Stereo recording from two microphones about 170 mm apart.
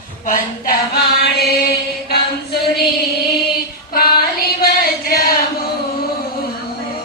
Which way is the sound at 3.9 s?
60° left (ahead or behind).